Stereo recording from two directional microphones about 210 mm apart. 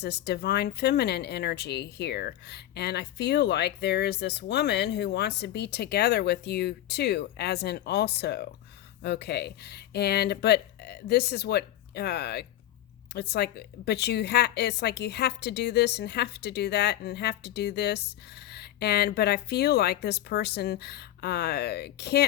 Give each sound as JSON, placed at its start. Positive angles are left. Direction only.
{"t": 0.0, "sound": "speech", "side_deg": 50}